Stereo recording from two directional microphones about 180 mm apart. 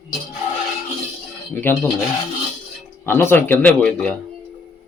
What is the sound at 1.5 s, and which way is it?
Speech, 10° left (ahead or behind).